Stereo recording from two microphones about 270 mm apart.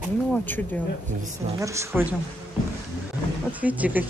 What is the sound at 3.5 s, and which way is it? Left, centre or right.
Speech, centre.